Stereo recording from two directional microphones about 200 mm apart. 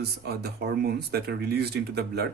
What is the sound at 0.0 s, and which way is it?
Speech, 55° right (ahead or behind).